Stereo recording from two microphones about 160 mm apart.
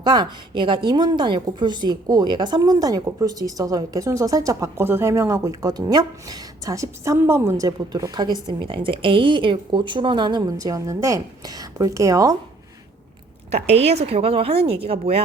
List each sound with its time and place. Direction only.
0.0 s a woman's voice: 30° right (ahead or behind)
13.7 s speech: 40° right (ahead or behind)